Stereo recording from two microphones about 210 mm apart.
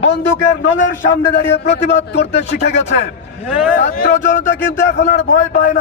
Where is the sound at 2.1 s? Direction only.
55° left (ahead or behind).